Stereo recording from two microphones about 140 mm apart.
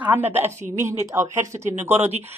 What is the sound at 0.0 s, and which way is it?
A woman's voice, 15° right (ahead or behind).